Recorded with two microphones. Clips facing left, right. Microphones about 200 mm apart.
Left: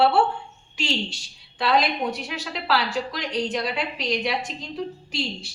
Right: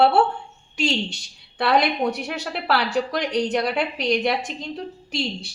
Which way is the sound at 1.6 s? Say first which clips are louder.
Right 2 dB; 65° right (ahead or behind).